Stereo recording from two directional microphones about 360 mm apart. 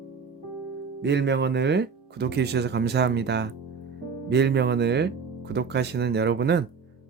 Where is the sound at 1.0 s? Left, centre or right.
Right.